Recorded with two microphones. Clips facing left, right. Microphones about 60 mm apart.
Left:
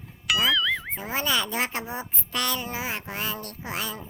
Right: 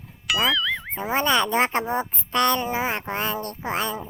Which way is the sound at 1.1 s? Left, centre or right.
Right.